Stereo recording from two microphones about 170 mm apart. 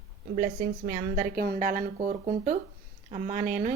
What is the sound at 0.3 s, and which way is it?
Speech, 55° right (ahead or behind).